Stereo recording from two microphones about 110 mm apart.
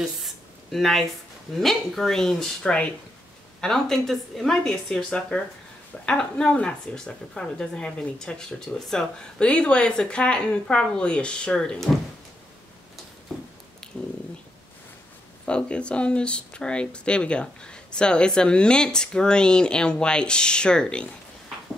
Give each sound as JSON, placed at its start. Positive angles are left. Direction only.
{"t": 0.0, "sound": "a sound", "side_deg": 0}
{"t": 1.5, "sound": "a woman's voice", "side_deg": 5}
{"t": 13.9, "sound": "speech", "side_deg": 15}
{"t": 15.4, "sound": "speech", "side_deg": 10}